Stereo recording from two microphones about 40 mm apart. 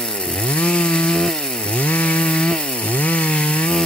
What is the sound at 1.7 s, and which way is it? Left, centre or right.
Chainsaw, left.